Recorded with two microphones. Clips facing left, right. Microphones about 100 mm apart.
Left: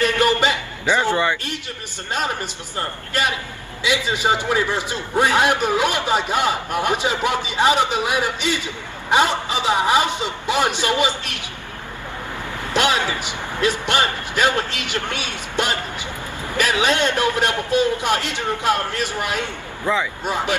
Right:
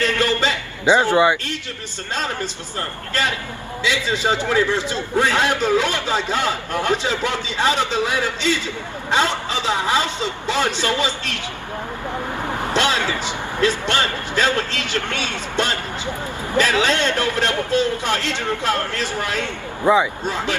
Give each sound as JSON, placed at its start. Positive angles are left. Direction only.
{"t": 0.0, "sound": "a man's voice", "side_deg": 15}
{"t": 1.1, "sound": "a man's voice", "side_deg": -15}
{"t": 2.1, "sound": "a man's voice", "side_deg": 15}
{"t": 12.7, "sound": "a man's voice", "side_deg": 15}
{"t": 19.8, "sound": "speech", "side_deg": -20}
{"t": 20.2, "sound": "a man's voice", "side_deg": 15}